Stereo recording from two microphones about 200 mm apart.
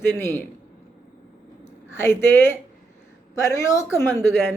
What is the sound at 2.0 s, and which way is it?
Speech, 10° left (ahead or behind).